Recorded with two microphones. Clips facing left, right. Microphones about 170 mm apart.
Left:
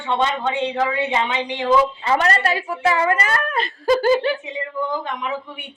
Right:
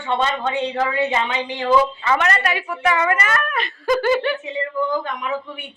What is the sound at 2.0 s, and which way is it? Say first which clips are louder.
A woman's voice: left 1 dB; 30° left (ahead or behind).